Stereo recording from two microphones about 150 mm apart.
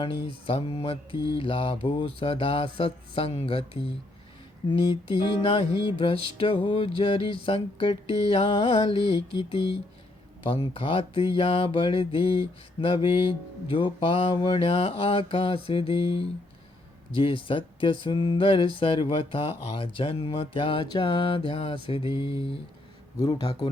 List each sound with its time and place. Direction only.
0.0 s speech: 35° left (ahead or behind)
23.1 s speech: 25° left (ahead or behind)